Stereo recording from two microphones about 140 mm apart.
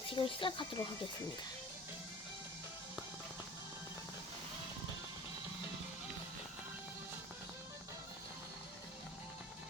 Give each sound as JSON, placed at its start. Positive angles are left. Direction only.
{"t": 0.1, "sound": "speech", "side_deg": 35}